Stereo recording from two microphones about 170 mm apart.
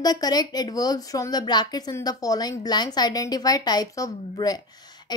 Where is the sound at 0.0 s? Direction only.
20° left (ahead or behind).